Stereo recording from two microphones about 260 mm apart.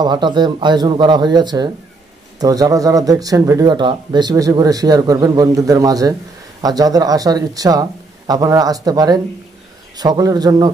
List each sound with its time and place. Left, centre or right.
0.0 s speech: centre